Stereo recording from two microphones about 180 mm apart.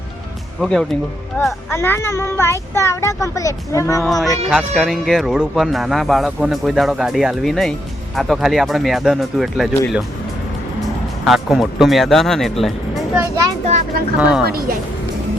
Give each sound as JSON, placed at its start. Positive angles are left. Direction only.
{"t": 0.6, "sound": "speech", "side_deg": 0}
{"t": 4.0, "sound": "speech", "side_deg": 0}
{"t": 11.3, "sound": "speech", "side_deg": 0}
{"t": 14.2, "sound": "speech", "side_deg": -5}
{"t": 14.4, "sound": "speech", "side_deg": -55}